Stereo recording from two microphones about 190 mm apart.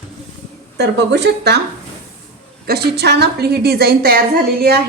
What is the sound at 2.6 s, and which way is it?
A woman's voice, 55° right (ahead or behind).